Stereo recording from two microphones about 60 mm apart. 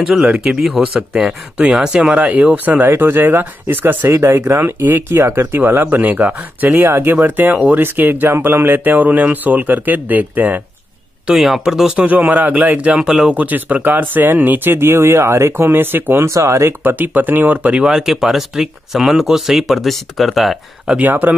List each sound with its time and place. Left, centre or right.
0.4 s speech: centre; by 4.1 s right
4.1 s speech: right
7.2 s speech: right
11.3 s speech: centre
12.1 s speech: right
16.3 s speech: right
16.8 s speech: right
17.7 s speech: centre